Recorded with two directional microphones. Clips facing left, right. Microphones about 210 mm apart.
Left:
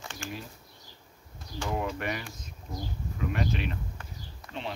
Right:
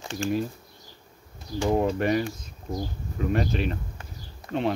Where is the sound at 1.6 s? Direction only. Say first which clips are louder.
Right 9 dB; 35° right (ahead or behind).